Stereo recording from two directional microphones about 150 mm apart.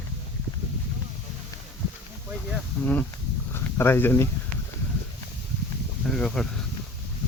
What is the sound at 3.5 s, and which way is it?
Speech, 15° left (ahead or behind).